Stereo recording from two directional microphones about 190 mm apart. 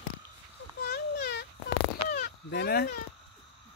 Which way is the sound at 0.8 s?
55° left (ahead or behind).